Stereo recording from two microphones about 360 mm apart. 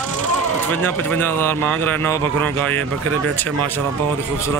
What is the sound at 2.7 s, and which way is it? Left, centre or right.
Speech, right.